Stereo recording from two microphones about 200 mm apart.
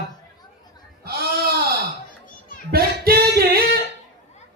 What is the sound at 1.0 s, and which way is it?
Sheep, 50° right (ahead or behind).